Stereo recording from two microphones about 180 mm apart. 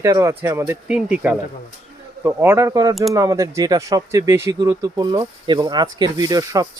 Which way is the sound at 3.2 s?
20° right (ahead or behind).